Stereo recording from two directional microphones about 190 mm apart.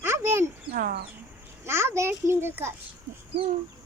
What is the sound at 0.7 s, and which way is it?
Speech, 50° right (ahead or behind).